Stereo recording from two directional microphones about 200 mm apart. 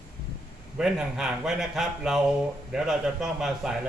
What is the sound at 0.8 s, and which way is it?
Speech, 5° right (ahead or behind).